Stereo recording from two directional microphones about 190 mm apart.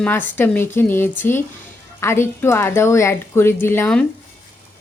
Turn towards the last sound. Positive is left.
turn(degrees=10)  # may be behind; listen again after turning